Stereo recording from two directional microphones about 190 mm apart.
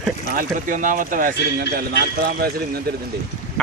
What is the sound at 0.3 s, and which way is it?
A man's voice, 45° right (ahead or behind).